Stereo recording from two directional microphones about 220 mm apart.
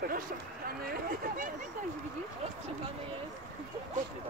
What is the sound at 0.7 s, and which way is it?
Speech, 40° right (ahead or behind).